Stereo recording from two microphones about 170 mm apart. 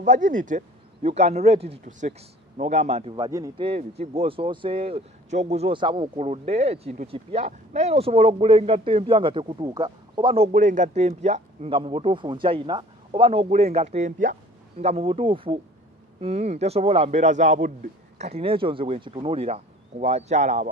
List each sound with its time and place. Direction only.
0.0 s speech: 45° right (ahead or behind)
3.2 s speech: 20° right (ahead or behind)
3.6 s speech: 40° right (ahead or behind)
10.5 s speech: 50° right (ahead or behind)